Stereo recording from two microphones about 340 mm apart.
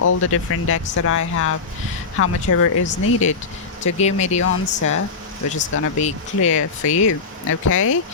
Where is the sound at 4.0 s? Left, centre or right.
Centre.